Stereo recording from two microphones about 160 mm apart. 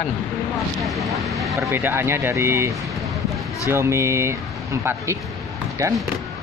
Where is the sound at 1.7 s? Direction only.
15° right (ahead or behind).